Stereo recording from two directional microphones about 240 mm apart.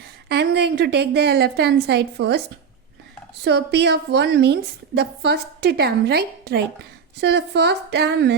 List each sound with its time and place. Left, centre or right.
0.3 s a woman's voice: right
3.4 s a woman's voice: right